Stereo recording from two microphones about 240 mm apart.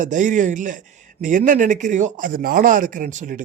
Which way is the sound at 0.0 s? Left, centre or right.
Right.